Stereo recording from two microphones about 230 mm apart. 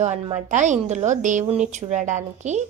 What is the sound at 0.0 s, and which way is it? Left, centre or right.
A woman's voice, right.